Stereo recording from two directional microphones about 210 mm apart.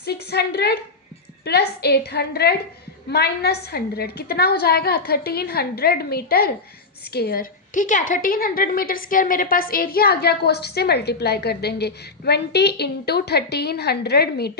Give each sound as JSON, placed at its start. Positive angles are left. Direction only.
{"t": 0.0, "sound": "a woman's voice", "side_deg": 50}